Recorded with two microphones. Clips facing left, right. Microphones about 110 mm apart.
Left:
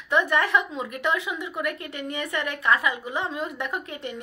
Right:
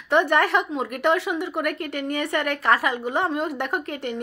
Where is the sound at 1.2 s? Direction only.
65° right (ahead or behind).